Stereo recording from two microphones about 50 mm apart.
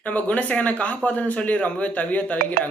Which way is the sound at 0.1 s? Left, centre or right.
Left.